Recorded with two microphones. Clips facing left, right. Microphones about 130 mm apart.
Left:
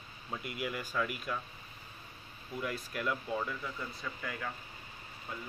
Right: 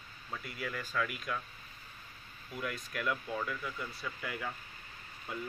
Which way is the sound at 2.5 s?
5° left (ahead or behind).